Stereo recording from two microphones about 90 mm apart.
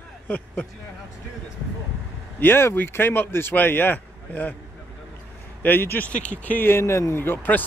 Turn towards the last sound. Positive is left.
turn(degrees=20)  # may be behind; listen again after turning